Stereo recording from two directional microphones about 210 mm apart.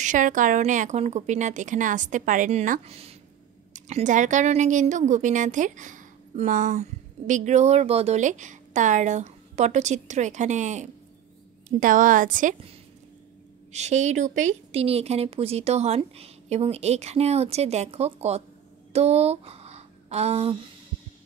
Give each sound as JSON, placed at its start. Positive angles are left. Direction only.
{"t": 0.0, "sound": "speech", "side_deg": -35}